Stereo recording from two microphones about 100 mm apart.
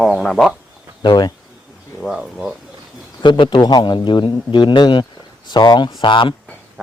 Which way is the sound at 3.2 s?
50° left (ahead or behind).